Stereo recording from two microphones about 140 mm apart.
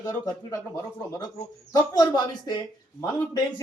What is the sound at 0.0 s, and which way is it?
Speech, 20° left (ahead or behind).